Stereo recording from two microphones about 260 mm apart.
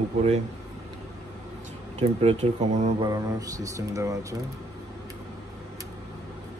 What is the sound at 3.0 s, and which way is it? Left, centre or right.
Speech, centre.